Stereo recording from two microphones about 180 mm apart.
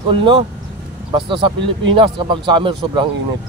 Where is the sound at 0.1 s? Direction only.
30° right (ahead or behind).